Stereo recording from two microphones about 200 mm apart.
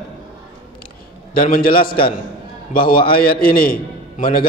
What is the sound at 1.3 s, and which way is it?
A man's voice, 45° left (ahead or behind).